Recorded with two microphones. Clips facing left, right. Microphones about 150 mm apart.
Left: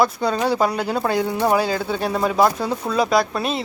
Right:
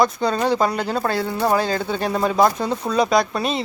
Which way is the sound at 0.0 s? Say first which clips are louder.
Even; 5° left (ahead or behind).